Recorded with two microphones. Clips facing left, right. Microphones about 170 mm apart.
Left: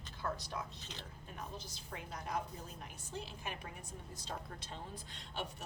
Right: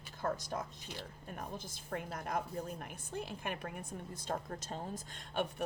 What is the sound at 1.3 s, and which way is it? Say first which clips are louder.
A woman's voice: right 3 dB; 50° right (ahead or behind).